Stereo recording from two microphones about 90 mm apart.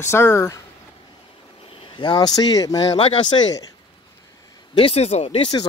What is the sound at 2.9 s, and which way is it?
Speech, 75° left (ahead or behind).